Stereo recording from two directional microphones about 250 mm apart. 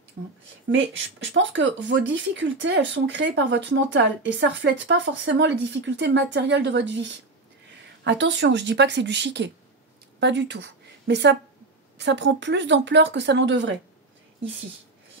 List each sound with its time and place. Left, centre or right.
1.2 s speech: right